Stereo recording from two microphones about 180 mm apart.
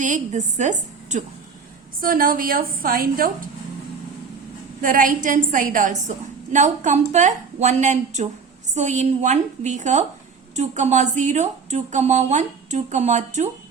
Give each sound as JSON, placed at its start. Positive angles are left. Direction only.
{"t": 0.0, "sound": "a woman's voice", "side_deg": -40}
{"t": 2.0, "sound": "a woman's voice", "side_deg": -50}
{"t": 4.8, "sound": "a woman's voice", "side_deg": -50}